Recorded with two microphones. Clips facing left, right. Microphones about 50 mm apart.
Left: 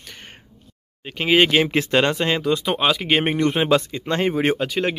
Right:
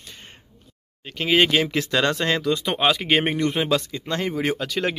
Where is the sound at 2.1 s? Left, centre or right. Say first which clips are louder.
Left 1 dB; centre.